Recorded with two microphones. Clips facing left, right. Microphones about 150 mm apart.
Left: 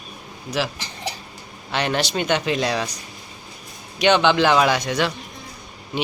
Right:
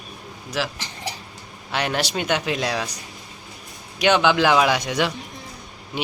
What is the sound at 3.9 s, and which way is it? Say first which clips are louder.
Speech: left 1 dB; 5° right (ahead or behind).